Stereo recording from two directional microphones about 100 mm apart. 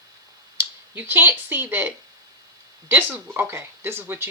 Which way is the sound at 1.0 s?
20° right (ahead or behind).